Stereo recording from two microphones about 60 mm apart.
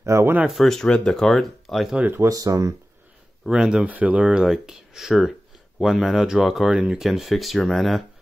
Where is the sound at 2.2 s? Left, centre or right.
Right.